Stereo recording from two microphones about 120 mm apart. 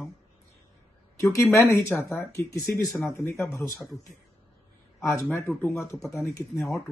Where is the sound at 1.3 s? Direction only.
25° left (ahead or behind).